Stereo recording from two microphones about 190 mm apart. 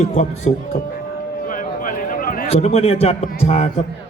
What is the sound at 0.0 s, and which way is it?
Speech, 40° left (ahead or behind).